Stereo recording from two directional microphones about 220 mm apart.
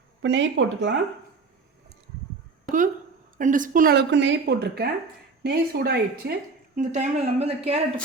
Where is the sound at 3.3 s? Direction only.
35° right (ahead or behind).